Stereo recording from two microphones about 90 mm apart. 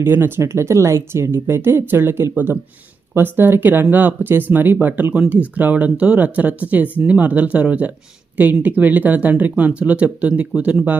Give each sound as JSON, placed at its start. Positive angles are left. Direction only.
{"t": 0.0, "sound": "speech", "side_deg": -25}